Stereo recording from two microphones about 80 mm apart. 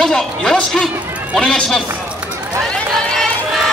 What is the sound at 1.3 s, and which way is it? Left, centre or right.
Speech, centre.